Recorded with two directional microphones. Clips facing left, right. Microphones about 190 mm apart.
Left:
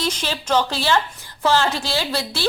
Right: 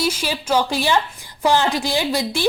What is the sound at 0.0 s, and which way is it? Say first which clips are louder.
A woman's voice: right 3 dB; 10° right (ahead or behind).